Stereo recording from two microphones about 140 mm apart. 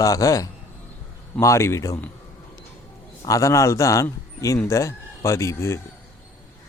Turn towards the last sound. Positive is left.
turn(degrees=20)  # may be behind; listen again after turning